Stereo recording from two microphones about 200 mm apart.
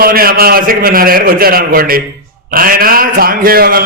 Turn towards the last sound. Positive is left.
turn(degrees=-50)  # may be behind; listen again after turning